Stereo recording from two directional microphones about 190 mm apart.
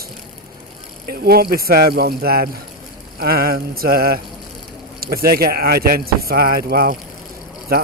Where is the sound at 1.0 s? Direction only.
55° right (ahead or behind).